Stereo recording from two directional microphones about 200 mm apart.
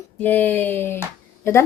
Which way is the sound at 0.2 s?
10° left (ahead or behind).